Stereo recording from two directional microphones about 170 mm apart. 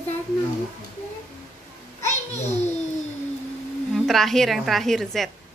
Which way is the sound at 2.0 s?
40° left (ahead or behind).